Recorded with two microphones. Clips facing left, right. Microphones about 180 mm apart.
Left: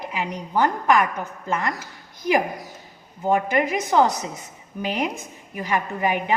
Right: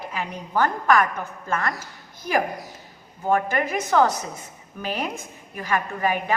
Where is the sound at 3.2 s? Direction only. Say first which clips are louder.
Left 2 dB; 15° left (ahead or behind).